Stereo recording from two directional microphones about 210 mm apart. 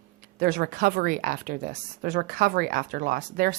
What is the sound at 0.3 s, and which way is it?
Speech, 40° right (ahead or behind).